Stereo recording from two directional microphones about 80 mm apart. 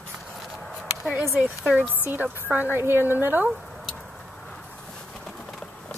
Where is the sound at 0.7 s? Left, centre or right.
Centre.